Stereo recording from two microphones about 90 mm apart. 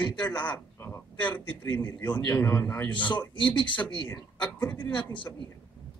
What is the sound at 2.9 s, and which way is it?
Speech, 65° left (ahead or behind).